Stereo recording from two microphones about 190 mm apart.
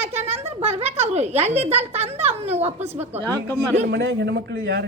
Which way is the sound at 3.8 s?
65° right (ahead or behind).